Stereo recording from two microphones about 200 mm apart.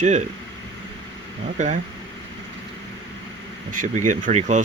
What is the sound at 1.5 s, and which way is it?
Speech, 40° right (ahead or behind).